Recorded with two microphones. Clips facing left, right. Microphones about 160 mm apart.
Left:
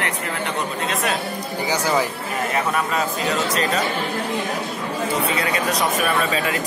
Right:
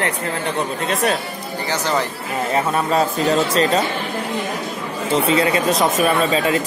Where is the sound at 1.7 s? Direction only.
10° left (ahead or behind).